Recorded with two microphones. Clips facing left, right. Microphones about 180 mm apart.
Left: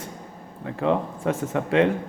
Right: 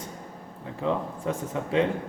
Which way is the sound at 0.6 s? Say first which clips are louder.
Left 5 dB; 70° left (ahead or behind).